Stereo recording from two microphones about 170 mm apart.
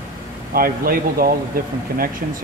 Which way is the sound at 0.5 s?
60° right (ahead or behind).